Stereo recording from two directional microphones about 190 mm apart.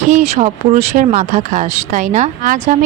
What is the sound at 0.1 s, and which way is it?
Speech, 35° right (ahead or behind).